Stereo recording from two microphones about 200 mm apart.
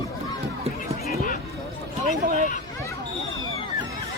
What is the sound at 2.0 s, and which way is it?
Speech, 40° right (ahead or behind).